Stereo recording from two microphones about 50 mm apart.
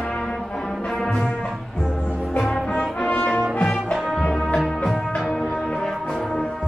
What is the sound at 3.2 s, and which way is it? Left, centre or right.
Brass instrument, left.